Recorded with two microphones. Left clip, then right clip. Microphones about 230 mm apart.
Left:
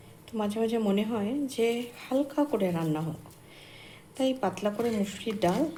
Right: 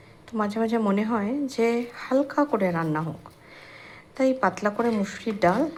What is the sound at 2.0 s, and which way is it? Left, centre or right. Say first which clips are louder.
Speech: right 5 dB; centre.